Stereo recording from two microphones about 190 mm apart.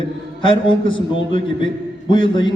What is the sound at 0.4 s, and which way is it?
Speech, 25° left (ahead or behind).